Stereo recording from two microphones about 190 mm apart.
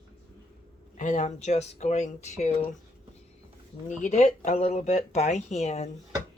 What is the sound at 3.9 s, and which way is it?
Speech, 40° left (ahead or behind).